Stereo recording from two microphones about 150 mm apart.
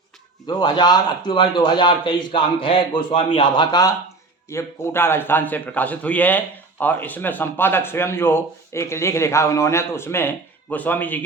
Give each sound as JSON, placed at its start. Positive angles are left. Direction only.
{"t": 0.4, "sound": "a man's voice", "side_deg": 30}